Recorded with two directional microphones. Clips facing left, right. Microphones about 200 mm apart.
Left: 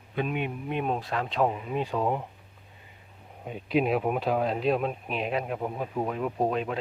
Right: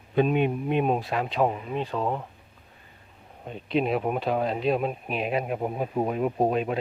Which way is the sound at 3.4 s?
5° left (ahead or behind).